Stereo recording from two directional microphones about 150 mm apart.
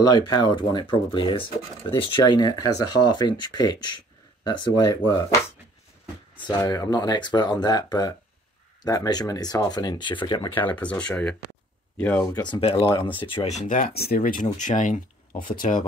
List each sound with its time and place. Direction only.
0.0 s speech: 25° left (ahead or behind)
6.6 s speech: 25° left (ahead or behind)
10.5 s speech: 10° left (ahead or behind)
12.4 s speech: 30° left (ahead or behind); by 15.8 s 65° left (ahead or behind)